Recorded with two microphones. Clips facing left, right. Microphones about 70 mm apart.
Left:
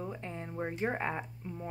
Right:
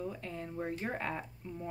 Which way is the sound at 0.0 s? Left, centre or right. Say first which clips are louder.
Even; left.